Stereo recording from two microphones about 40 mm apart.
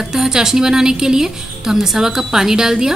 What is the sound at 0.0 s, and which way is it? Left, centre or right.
A woman's voice, centre.